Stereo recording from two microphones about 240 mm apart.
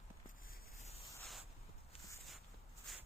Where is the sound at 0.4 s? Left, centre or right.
Left.